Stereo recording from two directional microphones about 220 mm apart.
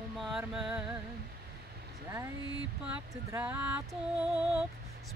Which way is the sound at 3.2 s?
10° right (ahead or behind).